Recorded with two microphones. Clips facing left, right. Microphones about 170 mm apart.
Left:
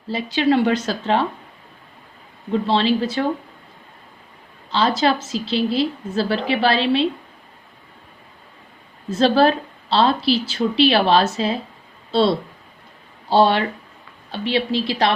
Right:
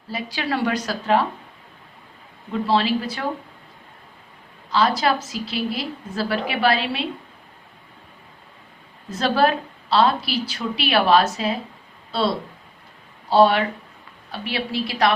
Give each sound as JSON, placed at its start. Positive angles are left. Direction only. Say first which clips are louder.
{"t": 0.1, "sound": "a woman's voice", "louder": "left 8 dB", "side_deg": 25}
{"t": 2.5, "sound": "a woman's voice", "louder": "left 2 dB", "side_deg": 25}
{"t": 4.7, "sound": "a woman's voice", "louder": "left 1 dB", "side_deg": 25}
{"t": 9.0, "sound": "a woman's voice", "louder": "left 4 dB", "side_deg": 30}